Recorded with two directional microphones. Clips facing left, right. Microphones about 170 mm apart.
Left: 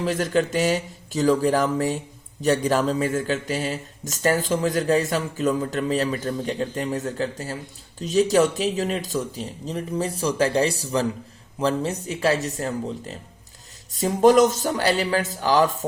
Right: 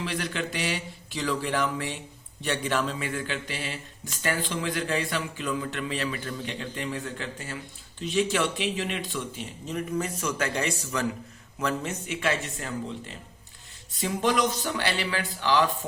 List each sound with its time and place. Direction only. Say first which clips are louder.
0.0 s a man's voice: left 9 dB; 45° left (ahead or behind)